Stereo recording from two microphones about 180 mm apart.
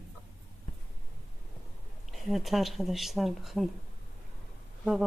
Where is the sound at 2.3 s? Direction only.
Centre (ahead or behind).